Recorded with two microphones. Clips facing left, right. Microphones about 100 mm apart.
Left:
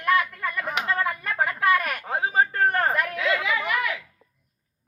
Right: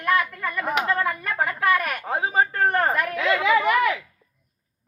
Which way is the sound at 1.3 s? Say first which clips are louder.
Left 1 dB; 10° left (ahead or behind).